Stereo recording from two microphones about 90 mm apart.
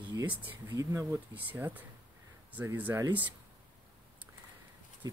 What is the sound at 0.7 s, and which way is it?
Speech, 35° right (ahead or behind).